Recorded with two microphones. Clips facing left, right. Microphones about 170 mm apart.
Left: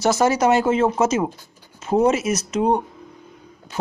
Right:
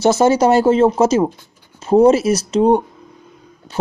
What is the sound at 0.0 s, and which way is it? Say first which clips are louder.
Speech: right 5 dB; 25° right (ahead or behind).